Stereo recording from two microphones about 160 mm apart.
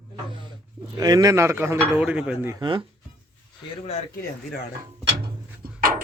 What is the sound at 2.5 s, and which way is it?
Speech, 30° right (ahead or behind).